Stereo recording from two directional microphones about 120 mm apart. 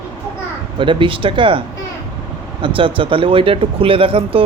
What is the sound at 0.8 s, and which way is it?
Speech, 45° right (ahead or behind).